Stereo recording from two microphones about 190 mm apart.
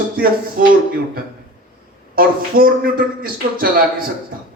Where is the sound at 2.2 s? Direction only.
50° right (ahead or behind).